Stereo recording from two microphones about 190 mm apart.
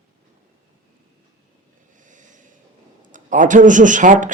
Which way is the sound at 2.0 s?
40° right (ahead or behind).